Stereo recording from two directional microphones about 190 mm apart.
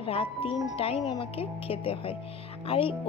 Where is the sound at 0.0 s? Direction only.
30° left (ahead or behind).